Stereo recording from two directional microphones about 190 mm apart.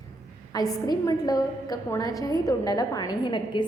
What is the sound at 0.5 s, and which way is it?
A woman's voice, 20° left (ahead or behind).